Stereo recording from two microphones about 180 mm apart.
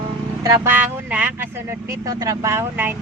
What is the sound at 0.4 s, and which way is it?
Speech, 15° right (ahead or behind).